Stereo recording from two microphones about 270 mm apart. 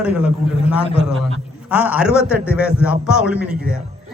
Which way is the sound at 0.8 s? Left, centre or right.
Left.